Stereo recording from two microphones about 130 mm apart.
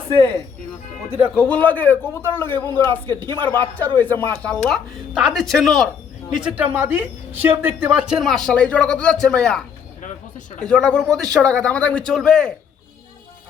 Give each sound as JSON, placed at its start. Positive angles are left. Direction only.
{"t": 1.4, "sound": "speech", "side_deg": 10}
{"t": 6.7, "sound": "speech", "side_deg": -20}
{"t": 10.0, "sound": "speech", "side_deg": 70}
{"t": 10.6, "sound": "speech", "side_deg": 5}
{"t": 11.1, "sound": "a man's voice", "side_deg": -25}
{"t": 11.3, "sound": "speech", "side_deg": 5}